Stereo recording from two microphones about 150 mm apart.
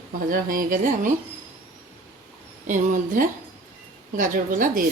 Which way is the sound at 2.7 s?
55° right (ahead or behind).